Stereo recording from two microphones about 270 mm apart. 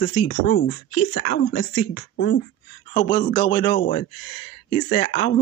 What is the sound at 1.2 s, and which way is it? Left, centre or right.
Speech, left.